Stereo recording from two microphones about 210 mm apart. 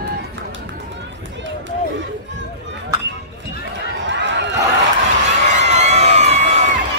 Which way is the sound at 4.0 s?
60° right (ahead or behind).